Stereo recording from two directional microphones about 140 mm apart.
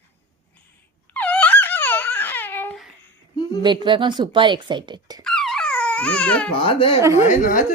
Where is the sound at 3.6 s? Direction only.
35° right (ahead or behind).